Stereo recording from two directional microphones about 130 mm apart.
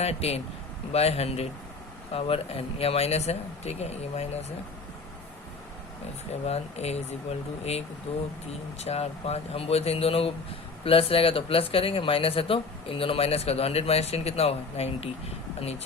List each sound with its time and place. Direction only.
0.0 s speech: 55° left (ahead or behind)
6.4 s speech: 55° left (ahead or behind)